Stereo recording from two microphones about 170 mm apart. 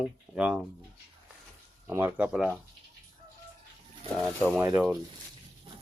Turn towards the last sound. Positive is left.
turn(degrees=-10)  # may be behind; listen again after turning